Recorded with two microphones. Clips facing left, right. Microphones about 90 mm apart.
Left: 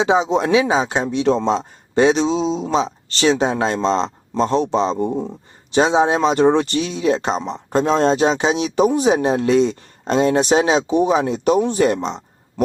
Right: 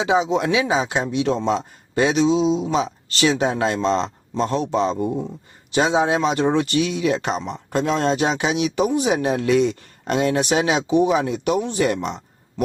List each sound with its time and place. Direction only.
0.0 s speech: 30° left (ahead or behind)